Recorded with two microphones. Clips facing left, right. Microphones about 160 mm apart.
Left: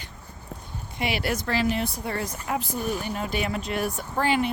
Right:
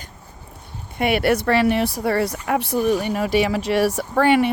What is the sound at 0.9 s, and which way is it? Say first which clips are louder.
Speech: right 9 dB; 55° right (ahead or behind).